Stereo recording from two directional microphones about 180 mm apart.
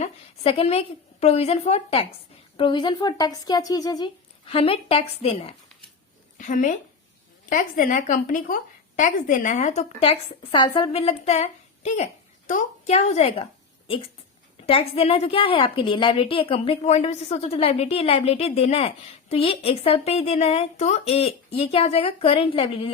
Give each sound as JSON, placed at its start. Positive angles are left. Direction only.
{"t": 0.0, "sound": "a woman's voice", "side_deg": 35}
{"t": 6.3, "sound": "a woman's voice", "side_deg": 45}
{"t": 14.7, "sound": "a woman's voice", "side_deg": 30}